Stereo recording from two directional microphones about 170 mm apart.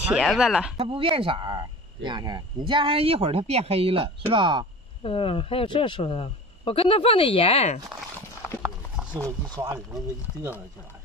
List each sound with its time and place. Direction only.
0.0 s speech: centre (ahead or behind)
0.7 s speech: 30° right (ahead or behind)
5.0 s speech: 30° left (ahead or behind)
8.4 s clip-clop: 15° right (ahead or behind)
9.0 s a sound: 5° right (ahead or behind)